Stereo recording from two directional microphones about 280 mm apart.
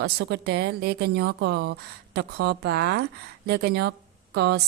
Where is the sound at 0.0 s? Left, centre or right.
Right.